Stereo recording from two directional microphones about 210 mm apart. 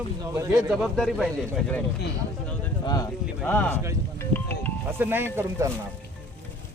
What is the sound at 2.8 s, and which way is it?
Speech, 15° left (ahead or behind).